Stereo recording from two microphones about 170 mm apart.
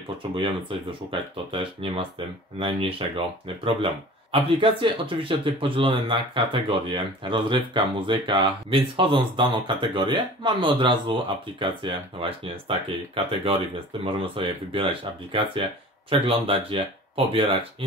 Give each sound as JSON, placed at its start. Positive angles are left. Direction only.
{"t": 1.1, "sound": "speech", "side_deg": -30}